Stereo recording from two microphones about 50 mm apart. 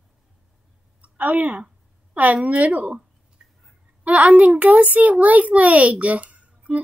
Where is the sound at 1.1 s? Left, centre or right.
Right.